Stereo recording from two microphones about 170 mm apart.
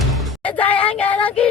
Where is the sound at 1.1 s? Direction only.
5° left (ahead or behind).